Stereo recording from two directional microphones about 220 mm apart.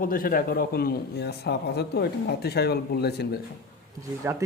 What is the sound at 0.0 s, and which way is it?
Speech, 40° left (ahead or behind).